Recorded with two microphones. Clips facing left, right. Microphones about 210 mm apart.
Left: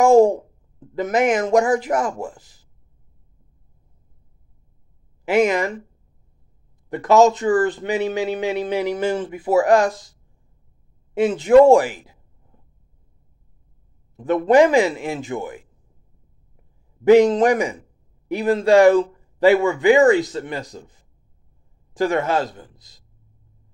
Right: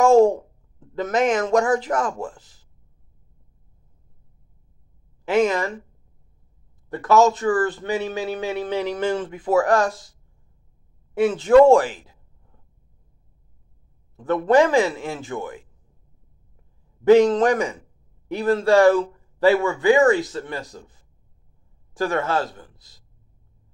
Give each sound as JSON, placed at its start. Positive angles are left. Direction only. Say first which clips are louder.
{"t": 0.0, "sound": "speech", "louder": "left 1 dB", "side_deg": 10}
{"t": 5.2, "sound": "a man's voice", "louder": "left 2 dB", "side_deg": 10}
{"t": 6.9, "sound": "a man's voice", "louder": "left 3 dB", "side_deg": 15}
{"t": 11.1, "sound": "a woman's voice", "louder": "left 1 dB", "side_deg": 15}
{"t": 14.1, "sound": "a man's voice", "louder": "left 2 dB", "side_deg": 15}
{"t": 16.5, "sound": "a sound", "louder": "left 5 dB", "side_deg": 10}
{"t": 18.3, "sound": "a man's voice", "louder": "left 2 dB", "side_deg": 15}